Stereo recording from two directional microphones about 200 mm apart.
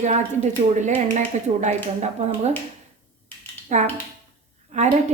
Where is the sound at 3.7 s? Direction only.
35° right (ahead or behind).